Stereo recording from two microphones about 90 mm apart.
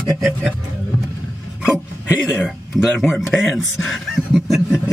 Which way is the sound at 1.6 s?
10° right (ahead or behind).